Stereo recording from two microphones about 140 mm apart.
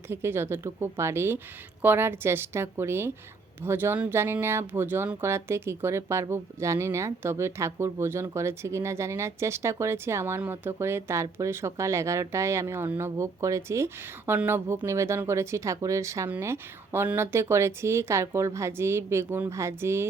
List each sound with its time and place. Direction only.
0.1 s speech: 15° right (ahead or behind)